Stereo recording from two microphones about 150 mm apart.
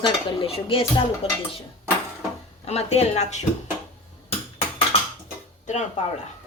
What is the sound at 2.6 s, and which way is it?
Speech, 45° left (ahead or behind).